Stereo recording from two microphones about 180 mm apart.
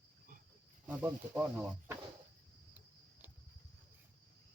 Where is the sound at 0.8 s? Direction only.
10° right (ahead or behind).